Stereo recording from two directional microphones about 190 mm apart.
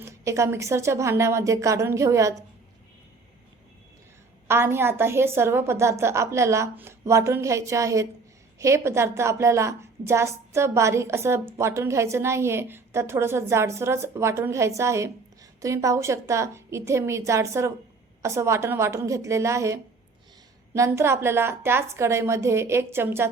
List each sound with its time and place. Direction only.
0.0 s a woman's voice: 15° right (ahead or behind)
4.4 s a woman's voice: 10° right (ahead or behind)